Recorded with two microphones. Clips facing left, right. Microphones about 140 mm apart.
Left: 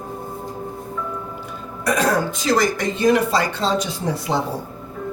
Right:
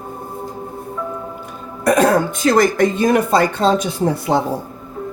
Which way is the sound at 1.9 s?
55° right (ahead or behind).